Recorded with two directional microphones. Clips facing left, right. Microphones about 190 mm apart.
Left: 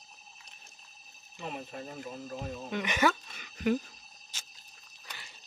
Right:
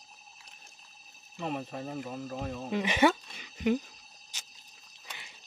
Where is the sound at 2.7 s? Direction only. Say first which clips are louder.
Right 3 dB; 25° right (ahead or behind).